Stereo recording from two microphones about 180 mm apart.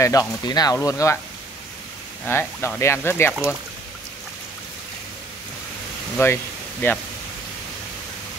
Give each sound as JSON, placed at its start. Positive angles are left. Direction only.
{"t": 0.0, "sound": "speech", "side_deg": 20}
{"t": 2.2, "sound": "speech", "side_deg": 10}
{"t": 6.1, "sound": "speech", "side_deg": 10}